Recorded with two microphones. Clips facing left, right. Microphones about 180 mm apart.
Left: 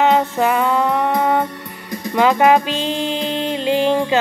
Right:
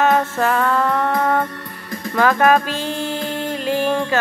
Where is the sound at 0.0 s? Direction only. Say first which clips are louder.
Left 2 dB; 15° left (ahead or behind).